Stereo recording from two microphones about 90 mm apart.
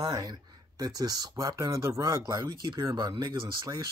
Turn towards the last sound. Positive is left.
turn(degrees=-40)  # may be behind; listen again after turning